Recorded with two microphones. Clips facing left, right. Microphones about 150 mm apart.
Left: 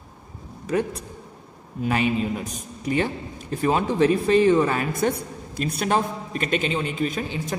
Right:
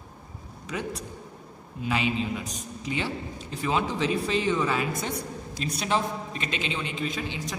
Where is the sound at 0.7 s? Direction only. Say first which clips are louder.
Left 8 dB; 55° left (ahead or behind).